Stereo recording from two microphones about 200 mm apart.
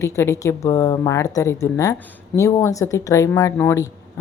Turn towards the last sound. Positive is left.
turn(degrees=15)  # may be behind; listen again after turning